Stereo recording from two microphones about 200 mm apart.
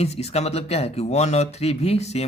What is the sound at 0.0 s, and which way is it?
Speech, 30° left (ahead or behind).